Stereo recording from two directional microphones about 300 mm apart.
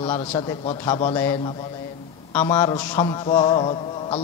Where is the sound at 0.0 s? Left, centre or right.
Centre.